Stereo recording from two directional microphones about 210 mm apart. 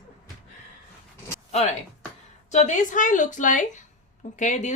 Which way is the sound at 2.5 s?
35° left (ahead or behind).